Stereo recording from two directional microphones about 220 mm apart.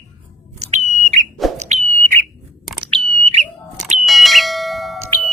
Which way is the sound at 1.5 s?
30° right (ahead or behind).